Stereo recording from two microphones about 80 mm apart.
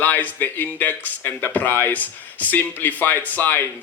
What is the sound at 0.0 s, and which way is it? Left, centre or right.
Speech, left.